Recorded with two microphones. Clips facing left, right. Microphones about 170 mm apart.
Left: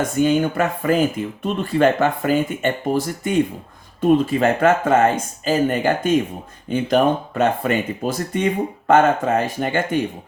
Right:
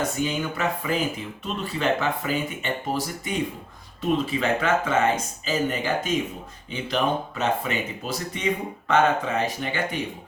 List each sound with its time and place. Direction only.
0.0 s speech: 50° left (ahead or behind)